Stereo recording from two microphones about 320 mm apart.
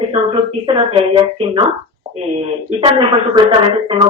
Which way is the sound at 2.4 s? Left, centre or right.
Centre.